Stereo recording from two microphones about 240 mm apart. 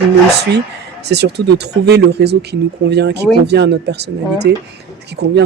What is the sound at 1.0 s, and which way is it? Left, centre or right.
Speech, right.